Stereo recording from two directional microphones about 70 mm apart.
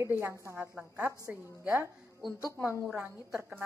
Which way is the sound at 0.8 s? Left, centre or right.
Centre.